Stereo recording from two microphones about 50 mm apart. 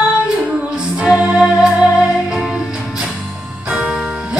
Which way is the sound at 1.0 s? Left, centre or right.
Centre.